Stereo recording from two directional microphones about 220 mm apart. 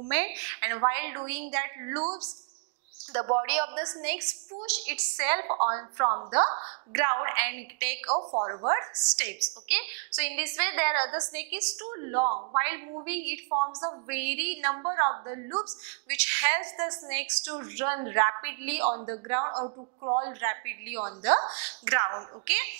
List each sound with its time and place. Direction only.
0.1 s a woman's voice: 15° right (ahead or behind)
3.1 s a woman's voice: 20° right (ahead or behind)
3.4 s a woman's voice: 10° right (ahead or behind)
5.5 s a woman's voice: 30° right (ahead or behind)
6.9 s a woman's voice: 15° right (ahead or behind)
8.1 s a woman's voice: 30° right (ahead or behind)
12.2 s speech: 30° right (ahead or behind)
12.5 s a woman's voice: 15° right (ahead or behind)
13.5 s a woman's voice: 25° right (ahead or behind)
14.1 s a woman's voice: 10° right (ahead or behind)
16.1 s a woman's voice: 10° right (ahead or behind)
19.5 s a woman's voice: 25° right (ahead or behind)
20.4 s a woman's voice: 15° right (ahead or behind)